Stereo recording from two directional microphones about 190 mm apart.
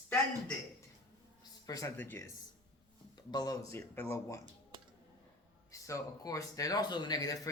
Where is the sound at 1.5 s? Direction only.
20° left (ahead or behind).